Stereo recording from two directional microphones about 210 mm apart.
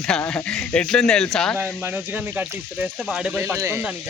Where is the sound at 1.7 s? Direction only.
10° right (ahead or behind).